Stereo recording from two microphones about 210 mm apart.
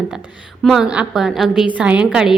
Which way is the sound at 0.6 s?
Centre (ahead or behind).